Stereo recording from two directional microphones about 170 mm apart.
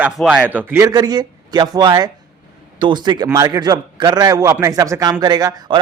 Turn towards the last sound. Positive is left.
turn(degrees=-25)  # may be behind; listen again after turning